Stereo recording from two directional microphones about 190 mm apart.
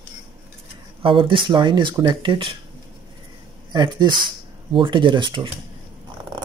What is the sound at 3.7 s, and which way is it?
Speech, 20° right (ahead or behind).